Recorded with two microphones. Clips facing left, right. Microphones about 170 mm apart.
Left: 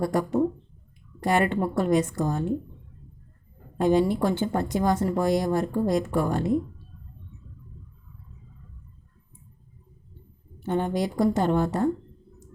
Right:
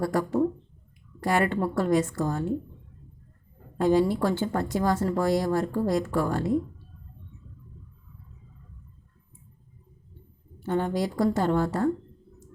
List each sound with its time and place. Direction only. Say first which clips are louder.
0.0 s a woman's voice: left 1 dB; 20° left (ahead or behind)
3.8 s a woman's voice: left 1 dB; 20° left (ahead or behind)
10.6 s a woman's voice: left 1 dB; 20° left (ahead or behind)